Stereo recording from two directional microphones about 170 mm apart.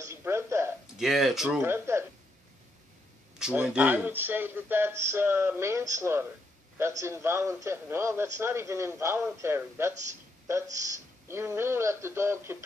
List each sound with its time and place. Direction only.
0.0 s a sound: 15° right (ahead or behind)
0.9 s speech: centre (ahead or behind)
3.3 s a man's voice: 5° right (ahead or behind)
11.2 s a man's voice: 15° right (ahead or behind)